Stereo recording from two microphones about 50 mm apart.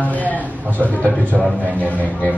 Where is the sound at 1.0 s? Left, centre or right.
Right.